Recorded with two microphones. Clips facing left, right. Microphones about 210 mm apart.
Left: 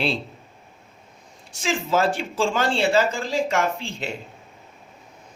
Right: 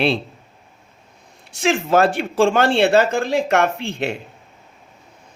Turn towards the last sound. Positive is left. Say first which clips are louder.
# right 4 dB
turn(degrees=-65)  # may be behind; listen again after turning